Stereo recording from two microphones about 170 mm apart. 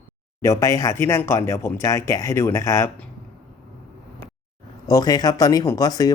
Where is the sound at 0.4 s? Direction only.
20° left (ahead or behind).